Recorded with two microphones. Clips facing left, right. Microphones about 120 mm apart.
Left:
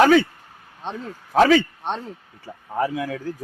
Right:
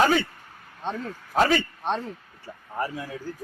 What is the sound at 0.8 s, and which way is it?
Speech, 15° left (ahead or behind).